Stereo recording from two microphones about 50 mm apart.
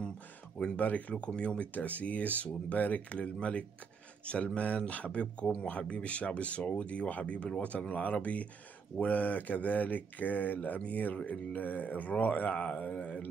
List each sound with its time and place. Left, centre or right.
0.6 s speech: centre
0.8 s speech: left